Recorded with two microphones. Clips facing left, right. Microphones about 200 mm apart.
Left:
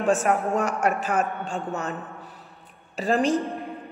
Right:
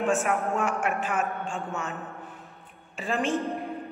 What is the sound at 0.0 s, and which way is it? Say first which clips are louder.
Speech: left 3 dB; 35° left (ahead or behind).